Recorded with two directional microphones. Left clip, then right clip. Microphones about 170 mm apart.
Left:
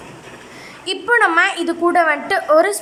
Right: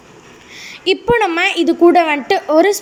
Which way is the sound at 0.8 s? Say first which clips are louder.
Right 1 dB; 15° right (ahead or behind).